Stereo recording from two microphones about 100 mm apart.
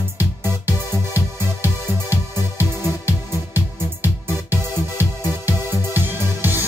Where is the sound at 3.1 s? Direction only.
20° right (ahead or behind).